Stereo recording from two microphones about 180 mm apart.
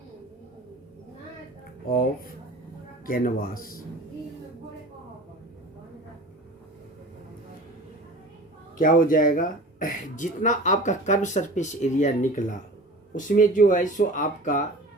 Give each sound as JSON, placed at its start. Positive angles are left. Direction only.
{"t": 1.9, "sound": "speech", "side_deg": 50}
{"t": 8.8, "sound": "speech", "side_deg": 50}